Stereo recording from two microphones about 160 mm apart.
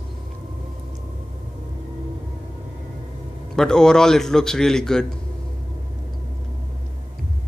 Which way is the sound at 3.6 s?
5° left (ahead or behind).